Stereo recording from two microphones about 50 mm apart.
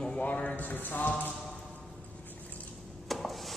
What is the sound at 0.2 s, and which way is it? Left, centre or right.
Speech, left.